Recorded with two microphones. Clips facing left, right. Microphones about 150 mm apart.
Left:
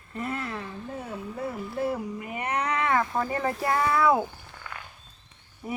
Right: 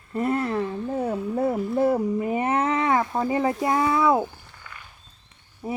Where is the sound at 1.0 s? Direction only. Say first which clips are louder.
Right 10 dB; 45° right (ahead or behind); by 4.2 s 20° right (ahead or behind).